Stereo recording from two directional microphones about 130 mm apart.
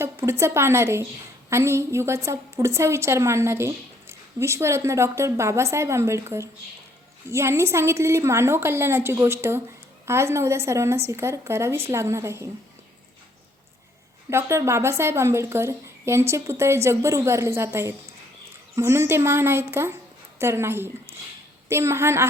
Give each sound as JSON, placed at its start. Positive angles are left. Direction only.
{"t": 0.0, "sound": "a woman's voice", "side_deg": -20}
{"t": 14.3, "sound": "a woman's voice", "side_deg": -20}